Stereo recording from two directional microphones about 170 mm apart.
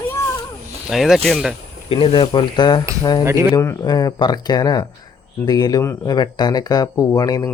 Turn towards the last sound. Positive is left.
turn(degrees=20)  # may be behind; listen again after turning